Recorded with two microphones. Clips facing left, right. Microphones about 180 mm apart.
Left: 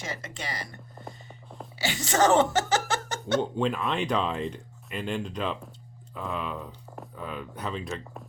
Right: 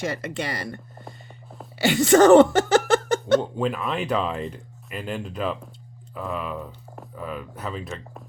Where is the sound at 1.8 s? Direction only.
60° right (ahead or behind).